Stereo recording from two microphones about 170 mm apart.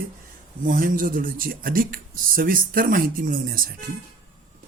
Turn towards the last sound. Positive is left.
turn(degrees=-60)  # may be behind; listen again after turning